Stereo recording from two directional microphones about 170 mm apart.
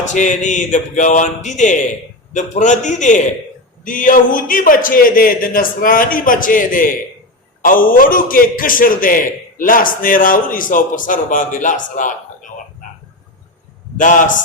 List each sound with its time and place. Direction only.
0.1 s a man's voice: 45° left (ahead or behind)
13.9 s a man's voice: 50° left (ahead or behind)